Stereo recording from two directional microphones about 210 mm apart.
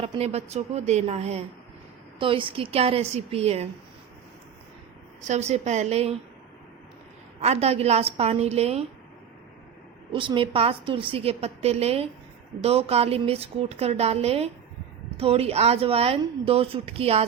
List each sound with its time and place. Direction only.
0.0 s a woman's voice: 30° right (ahead or behind)
5.2 s a woman's voice: 35° right (ahead or behind)
7.4 s a woman's voice: 30° right (ahead or behind)
10.1 s a woman's voice: 25° right (ahead or behind)